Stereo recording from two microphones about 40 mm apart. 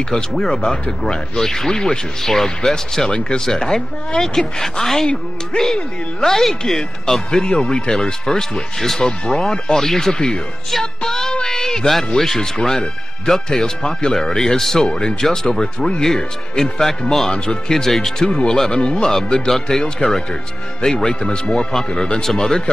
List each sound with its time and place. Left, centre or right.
0.4 s speech: centre
5.5 s speech: left
6.2 s speech: centre
9.2 s speech: left
11.0 s child singing: centre
11.4 s a sound: centre
12.4 s speech: centre
14.9 s speech: left
15.2 s speech: centre
15.6 s speech: left